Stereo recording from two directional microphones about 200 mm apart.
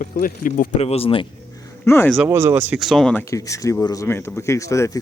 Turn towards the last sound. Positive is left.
turn(degrees=15)  # may be behind; listen again after turning